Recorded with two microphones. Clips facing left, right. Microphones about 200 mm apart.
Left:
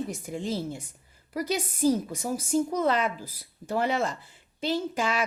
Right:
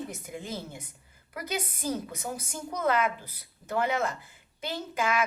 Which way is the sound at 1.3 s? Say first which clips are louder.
Left 5 dB; 35° left (ahead or behind).